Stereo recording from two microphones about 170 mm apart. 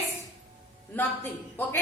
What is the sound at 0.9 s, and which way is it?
Speech, 10° left (ahead or behind).